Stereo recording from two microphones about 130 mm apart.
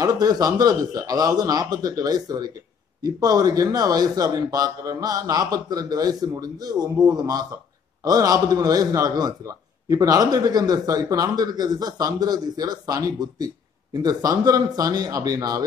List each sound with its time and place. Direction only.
0.0 s a man's voice: 30° right (ahead or behind)